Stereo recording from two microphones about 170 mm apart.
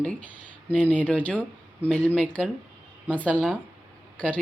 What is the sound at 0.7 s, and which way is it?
Speech, 10° left (ahead or behind).